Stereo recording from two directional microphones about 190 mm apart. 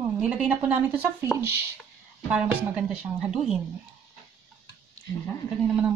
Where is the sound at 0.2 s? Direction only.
5° right (ahead or behind).